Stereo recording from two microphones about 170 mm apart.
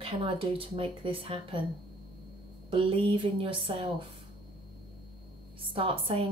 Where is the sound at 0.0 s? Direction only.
30° right (ahead or behind).